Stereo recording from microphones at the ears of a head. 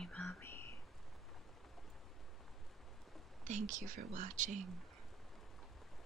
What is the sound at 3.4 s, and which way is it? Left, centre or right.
Speech, right.